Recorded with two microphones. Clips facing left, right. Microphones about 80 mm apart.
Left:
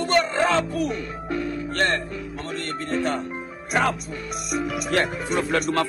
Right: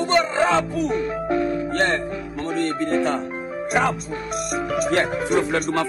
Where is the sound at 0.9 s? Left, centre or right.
Right.